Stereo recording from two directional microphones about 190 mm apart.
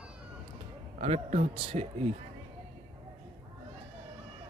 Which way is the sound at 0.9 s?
35° right (ahead or behind).